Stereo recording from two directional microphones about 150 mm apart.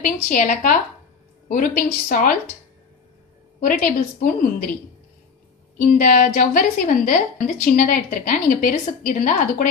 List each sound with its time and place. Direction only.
0.0 s a woman's voice: 60° left (ahead or behind)
3.6 s a woman's voice: 65° left (ahead or behind)
5.8 s a woman's voice: 65° left (ahead or behind)